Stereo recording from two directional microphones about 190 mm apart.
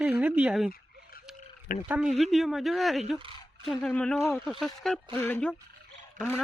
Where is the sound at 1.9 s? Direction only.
5° right (ahead or behind).